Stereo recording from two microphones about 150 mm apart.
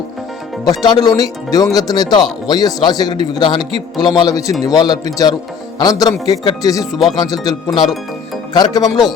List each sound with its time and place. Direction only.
0.6 s speech: 25° left (ahead or behind)
7.7 s speech: centre (ahead or behind)
8.5 s speech: 25° left (ahead or behind)